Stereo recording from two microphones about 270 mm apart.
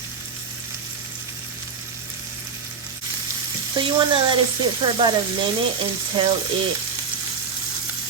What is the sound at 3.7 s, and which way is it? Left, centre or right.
Speech, centre.